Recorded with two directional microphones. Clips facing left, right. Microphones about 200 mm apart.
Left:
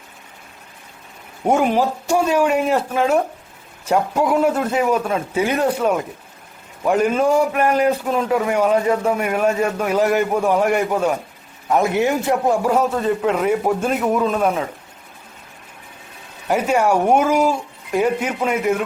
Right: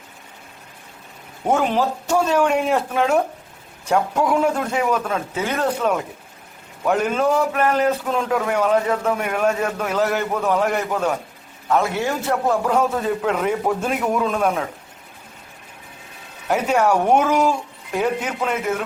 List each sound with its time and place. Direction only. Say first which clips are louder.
1.5 s a man's voice: left 2 dB; 10° left (ahead or behind)
16.5 s a man's voice: left 1 dB; 10° left (ahead or behind)